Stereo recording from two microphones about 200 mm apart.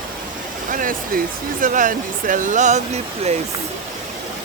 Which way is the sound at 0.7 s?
45° right (ahead or behind).